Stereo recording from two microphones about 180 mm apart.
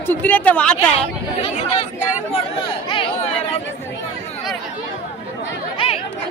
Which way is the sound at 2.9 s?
30° left (ahead or behind).